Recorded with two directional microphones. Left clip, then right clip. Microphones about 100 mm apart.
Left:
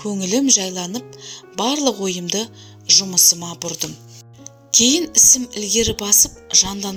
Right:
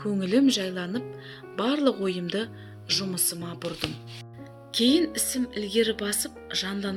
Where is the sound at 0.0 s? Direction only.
55° left (ahead or behind).